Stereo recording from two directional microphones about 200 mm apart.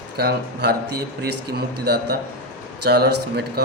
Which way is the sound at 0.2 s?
50° right (ahead or behind).